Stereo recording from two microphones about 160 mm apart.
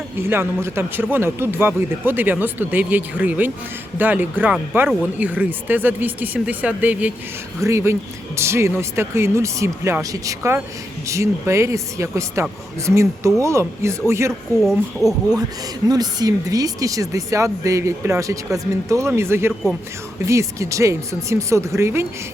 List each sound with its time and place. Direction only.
0.2 s speech: 15° right (ahead or behind)
14.6 s speech: centre (ahead or behind)
15.9 s speech: 25° right (ahead or behind)